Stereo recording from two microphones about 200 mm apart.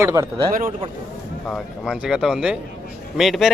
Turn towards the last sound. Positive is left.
turn(degrees=0)  # may be behind; listen again after turning